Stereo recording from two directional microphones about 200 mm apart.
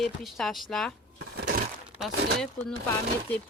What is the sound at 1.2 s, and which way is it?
Crushing, 50° right (ahead or behind).